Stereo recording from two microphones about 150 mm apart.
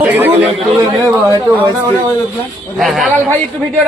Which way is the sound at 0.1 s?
15° right (ahead or behind).